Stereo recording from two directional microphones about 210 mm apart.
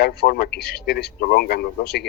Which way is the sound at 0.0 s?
45° left (ahead or behind).